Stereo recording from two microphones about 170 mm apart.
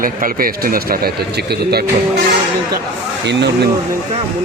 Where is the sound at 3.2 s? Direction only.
90° right.